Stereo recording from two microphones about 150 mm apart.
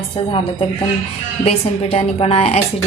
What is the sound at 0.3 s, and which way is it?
A woman's voice, 35° left (ahead or behind).